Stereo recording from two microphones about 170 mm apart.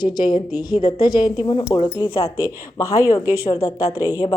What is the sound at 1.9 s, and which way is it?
Speech, 20° left (ahead or behind).